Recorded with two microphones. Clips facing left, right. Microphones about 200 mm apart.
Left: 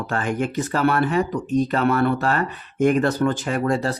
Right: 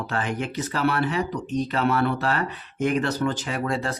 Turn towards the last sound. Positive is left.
turn(degrees=40)  # may be behind; listen again after turning